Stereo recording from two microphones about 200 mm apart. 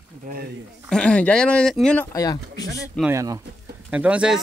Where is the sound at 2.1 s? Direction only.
15° left (ahead or behind).